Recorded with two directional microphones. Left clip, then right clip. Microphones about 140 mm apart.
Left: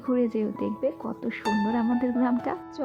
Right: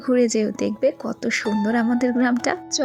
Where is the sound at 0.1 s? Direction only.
30° right (ahead or behind).